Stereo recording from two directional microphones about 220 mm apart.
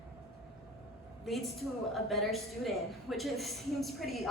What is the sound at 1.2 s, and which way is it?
A woman's voice, centre (ahead or behind).